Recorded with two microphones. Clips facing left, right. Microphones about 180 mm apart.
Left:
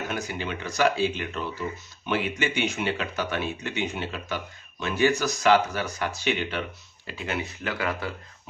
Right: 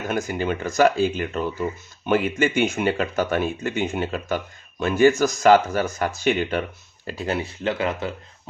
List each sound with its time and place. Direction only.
0.1 s speech: 45° right (ahead or behind); by 8.1 s 25° right (ahead or behind)